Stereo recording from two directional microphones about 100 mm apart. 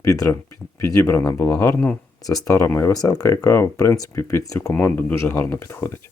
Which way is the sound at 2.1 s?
35° left (ahead or behind).